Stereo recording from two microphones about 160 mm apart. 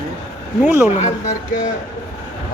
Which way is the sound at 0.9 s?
45° left (ahead or behind).